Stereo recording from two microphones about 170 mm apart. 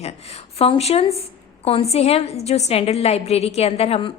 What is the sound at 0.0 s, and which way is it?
A woman's voice, 40° left (ahead or behind).